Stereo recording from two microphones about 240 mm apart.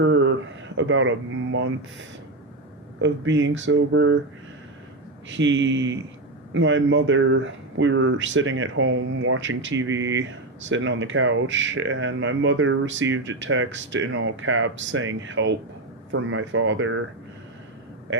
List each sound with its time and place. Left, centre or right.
0.0 s a sound: right
0.8 s speech: right
3.0 s speech: right
5.3 s speech: right